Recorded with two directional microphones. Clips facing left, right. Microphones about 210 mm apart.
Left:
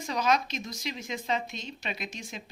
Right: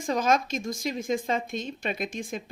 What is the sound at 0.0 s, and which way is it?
A woman's voice, 50° right (ahead or behind).